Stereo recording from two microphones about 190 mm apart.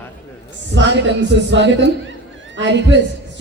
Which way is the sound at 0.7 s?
70° right (ahead or behind).